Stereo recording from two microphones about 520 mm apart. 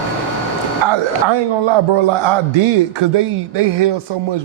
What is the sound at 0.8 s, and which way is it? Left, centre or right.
A man's voice, right.